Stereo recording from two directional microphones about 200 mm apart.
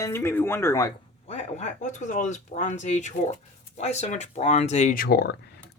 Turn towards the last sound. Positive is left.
turn(degrees=50)  # may be behind; listen again after turning